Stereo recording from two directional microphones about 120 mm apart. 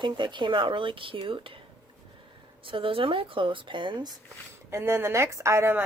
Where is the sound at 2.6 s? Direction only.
45° right (ahead or behind).